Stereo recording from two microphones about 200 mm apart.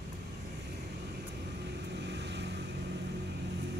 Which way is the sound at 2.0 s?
60° right (ahead or behind).